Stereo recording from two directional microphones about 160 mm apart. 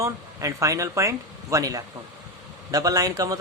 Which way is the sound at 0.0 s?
20° right (ahead or behind).